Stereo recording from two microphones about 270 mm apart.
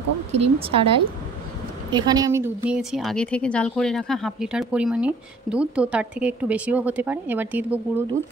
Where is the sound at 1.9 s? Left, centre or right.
Centre.